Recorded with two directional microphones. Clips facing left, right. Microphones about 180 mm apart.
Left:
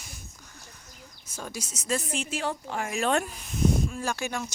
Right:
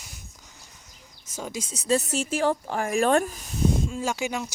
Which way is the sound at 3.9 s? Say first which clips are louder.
Right 3 dB; 20° right (ahead or behind).